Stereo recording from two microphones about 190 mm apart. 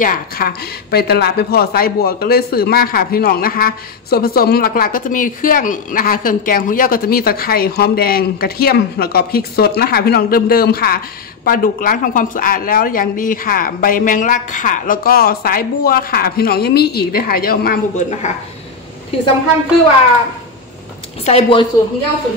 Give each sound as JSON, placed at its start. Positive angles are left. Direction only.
{"t": 0.0, "sound": "speech", "side_deg": 50}
{"t": 21.3, "sound": "a woman's voice", "side_deg": 30}